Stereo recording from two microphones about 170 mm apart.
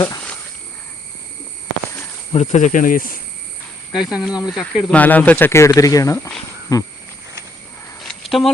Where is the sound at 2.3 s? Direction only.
40° left (ahead or behind).